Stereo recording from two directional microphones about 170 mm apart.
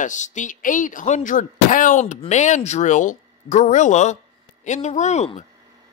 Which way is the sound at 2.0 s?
40° left (ahead or behind).